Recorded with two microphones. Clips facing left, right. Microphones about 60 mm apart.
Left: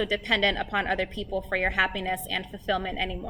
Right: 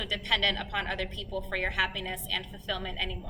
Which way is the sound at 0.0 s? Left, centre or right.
Left.